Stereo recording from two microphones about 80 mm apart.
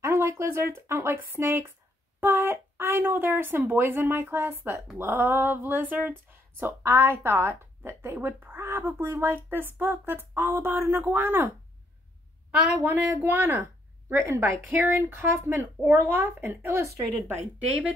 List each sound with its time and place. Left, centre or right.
0.0 s a woman's voice: right
12.4 s a woman's voice: centre; by 17.4 s right